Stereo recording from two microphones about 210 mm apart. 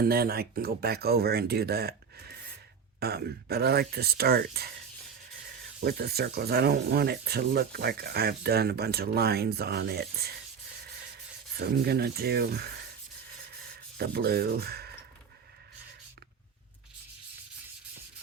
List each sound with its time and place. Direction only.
0.0 s speech: 45° right (ahead or behind)
3.0 s speech: 50° right (ahead or behind)
5.8 s speech: 50° right (ahead or behind)
11.5 s speech: 50° right (ahead or behind)
14.0 s speech: 50° right (ahead or behind)